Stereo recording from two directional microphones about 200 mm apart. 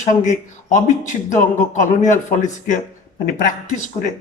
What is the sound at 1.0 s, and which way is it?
A man's voice, 40° left (ahead or behind).